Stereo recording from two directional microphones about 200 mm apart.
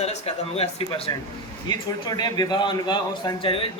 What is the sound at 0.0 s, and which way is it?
A man's voice, 30° left (ahead or behind).